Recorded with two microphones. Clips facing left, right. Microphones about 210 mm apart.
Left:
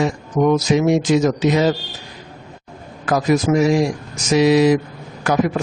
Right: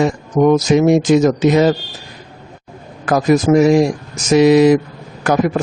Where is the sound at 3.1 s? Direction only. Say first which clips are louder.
Right 4 dB; 50° right (ahead or behind).